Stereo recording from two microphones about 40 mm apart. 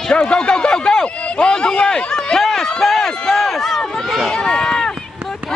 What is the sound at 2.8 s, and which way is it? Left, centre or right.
Run, centre.